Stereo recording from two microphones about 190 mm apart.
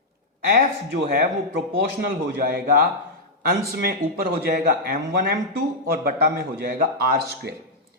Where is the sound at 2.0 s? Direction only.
50° right (ahead or behind).